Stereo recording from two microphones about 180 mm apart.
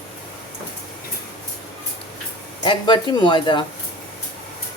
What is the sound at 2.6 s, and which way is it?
Speech, 25° left (ahead or behind).